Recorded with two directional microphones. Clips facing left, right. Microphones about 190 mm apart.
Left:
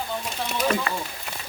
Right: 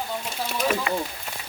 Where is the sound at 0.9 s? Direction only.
15° right (ahead or behind).